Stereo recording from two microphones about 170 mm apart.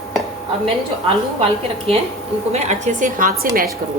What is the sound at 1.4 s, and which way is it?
A woman's voice, 35° right (ahead or behind).